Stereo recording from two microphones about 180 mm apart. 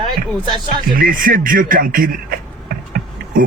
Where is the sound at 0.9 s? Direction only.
50° right (ahead or behind).